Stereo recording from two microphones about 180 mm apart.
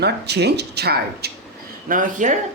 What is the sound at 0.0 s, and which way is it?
Speech, 65° right (ahead or behind).